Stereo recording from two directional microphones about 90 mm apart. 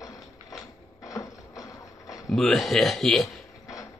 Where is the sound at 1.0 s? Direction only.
40° left (ahead or behind).